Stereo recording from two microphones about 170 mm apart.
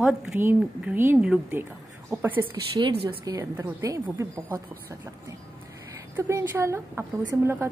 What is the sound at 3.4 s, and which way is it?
A woman's voice, 15° right (ahead or behind).